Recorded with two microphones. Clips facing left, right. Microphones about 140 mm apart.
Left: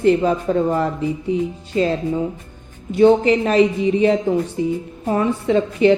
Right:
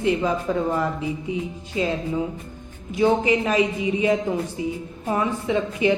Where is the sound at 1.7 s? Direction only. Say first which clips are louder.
Left 6 dB; 50° left (ahead or behind).